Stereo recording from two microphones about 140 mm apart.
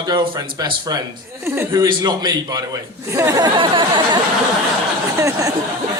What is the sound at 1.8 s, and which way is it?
A man's voice, 30° right (ahead or behind).